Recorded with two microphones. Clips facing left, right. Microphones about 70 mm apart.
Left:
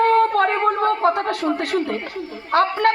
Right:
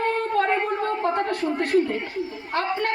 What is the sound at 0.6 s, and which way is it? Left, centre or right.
A woman's voice, left.